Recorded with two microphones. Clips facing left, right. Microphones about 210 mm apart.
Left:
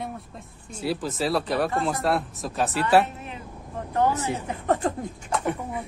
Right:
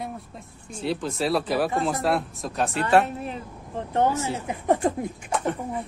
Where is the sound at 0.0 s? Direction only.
5° left (ahead or behind).